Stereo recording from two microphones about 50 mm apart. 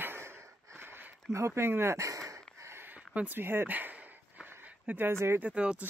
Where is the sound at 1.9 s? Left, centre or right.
Right.